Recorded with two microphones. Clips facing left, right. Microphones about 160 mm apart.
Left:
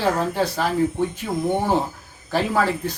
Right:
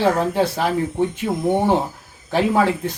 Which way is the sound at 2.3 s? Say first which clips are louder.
Right 3 dB; 25° right (ahead or behind).